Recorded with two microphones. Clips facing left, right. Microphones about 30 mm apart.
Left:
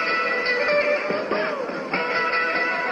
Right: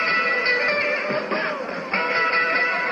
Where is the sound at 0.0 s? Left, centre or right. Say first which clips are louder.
Right 2 dB; centre.